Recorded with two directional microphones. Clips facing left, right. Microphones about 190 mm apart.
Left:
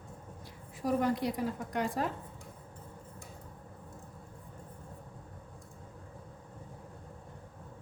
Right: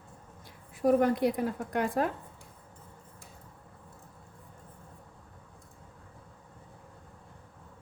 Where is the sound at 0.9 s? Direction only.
55° right (ahead or behind).